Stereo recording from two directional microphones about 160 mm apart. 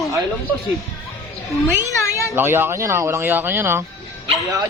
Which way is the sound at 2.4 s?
15° right (ahead or behind).